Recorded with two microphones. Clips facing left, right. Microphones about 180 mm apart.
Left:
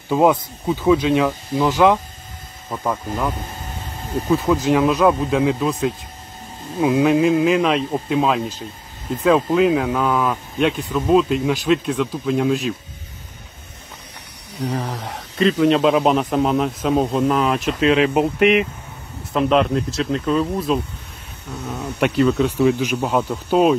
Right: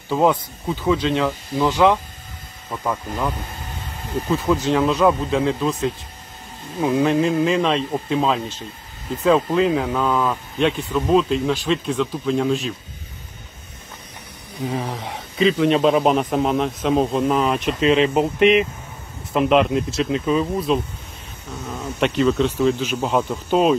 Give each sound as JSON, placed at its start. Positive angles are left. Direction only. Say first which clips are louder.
{"t": 0.1, "sound": "speech", "louder": "left 2 dB", "side_deg": 15}
{"t": 2.7, "sound": "speech", "louder": "left 2 dB", "side_deg": 5}
{"t": 14.6, "sound": "speech", "louder": "left 1 dB", "side_deg": 0}